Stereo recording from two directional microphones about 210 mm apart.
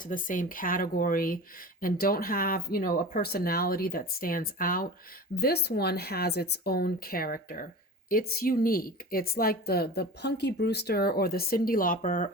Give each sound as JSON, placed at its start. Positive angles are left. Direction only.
{"t": 0.0, "sound": "speech", "side_deg": 40}